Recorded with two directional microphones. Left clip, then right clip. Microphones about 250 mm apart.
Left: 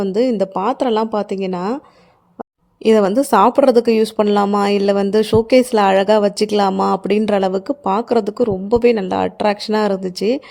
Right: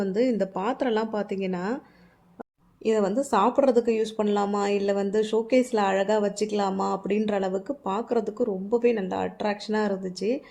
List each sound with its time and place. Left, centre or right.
0.0 s speech: left